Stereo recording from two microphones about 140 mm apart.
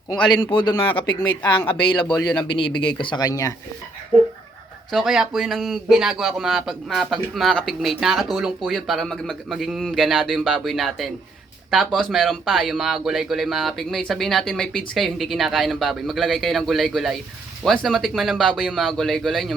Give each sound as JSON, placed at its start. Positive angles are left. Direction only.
{"t": 0.3, "sound": "speech", "side_deg": 30}
{"t": 4.9, "sound": "speech", "side_deg": 0}